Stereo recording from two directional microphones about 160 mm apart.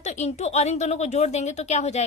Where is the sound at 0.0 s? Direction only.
45° left (ahead or behind).